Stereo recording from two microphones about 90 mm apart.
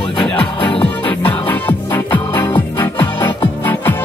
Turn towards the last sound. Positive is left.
turn(degrees=25)  # may be behind; listen again after turning